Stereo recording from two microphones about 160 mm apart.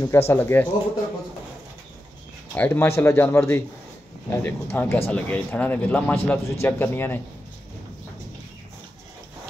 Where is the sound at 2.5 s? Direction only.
10° left (ahead or behind).